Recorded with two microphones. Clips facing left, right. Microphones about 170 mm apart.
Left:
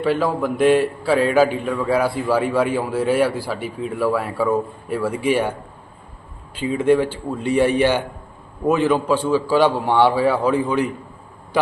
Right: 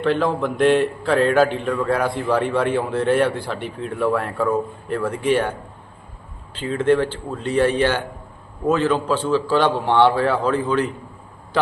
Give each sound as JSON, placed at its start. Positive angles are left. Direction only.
{"t": 0.0, "sound": "a man's voice", "side_deg": 5}